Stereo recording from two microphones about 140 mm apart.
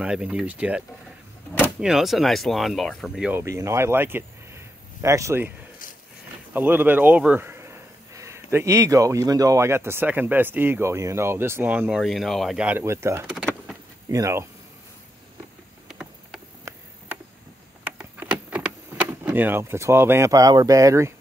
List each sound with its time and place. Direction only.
0.0 s a man's voice: 10° right (ahead or behind)
3.4 s speech: 20° right (ahead or behind)
6.5 s a man's voice: 15° right (ahead or behind)
15.9 s vehicle: 5° right (ahead or behind)
17.8 s vehicle: 10° right (ahead or behind)